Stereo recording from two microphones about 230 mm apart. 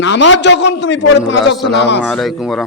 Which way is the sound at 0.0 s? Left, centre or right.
Left.